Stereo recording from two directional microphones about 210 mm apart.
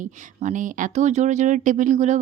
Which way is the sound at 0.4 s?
40° right (ahead or behind).